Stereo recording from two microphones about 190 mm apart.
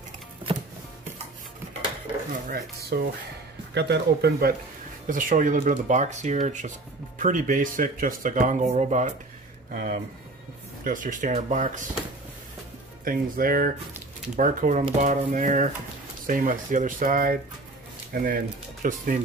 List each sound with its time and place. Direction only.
2.4 s speech: 55° right (ahead or behind)
5.0 s speech: 45° right (ahead or behind)
13.0 s speech: 50° right (ahead or behind)